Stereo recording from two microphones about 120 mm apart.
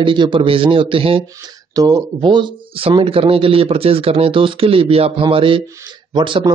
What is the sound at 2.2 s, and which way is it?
Speech, 40° right (ahead or behind).